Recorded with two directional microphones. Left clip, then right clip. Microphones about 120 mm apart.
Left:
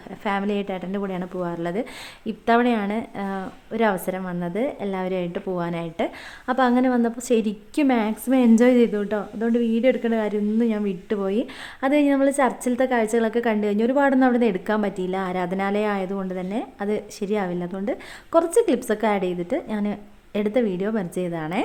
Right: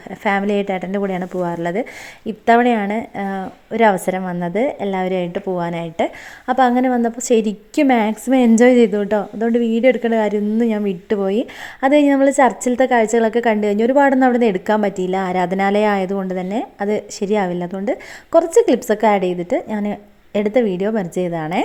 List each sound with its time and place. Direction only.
0.2 s a woman's voice: 40° right (ahead or behind)